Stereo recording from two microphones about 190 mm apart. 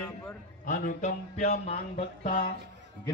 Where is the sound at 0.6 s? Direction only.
45° left (ahead or behind).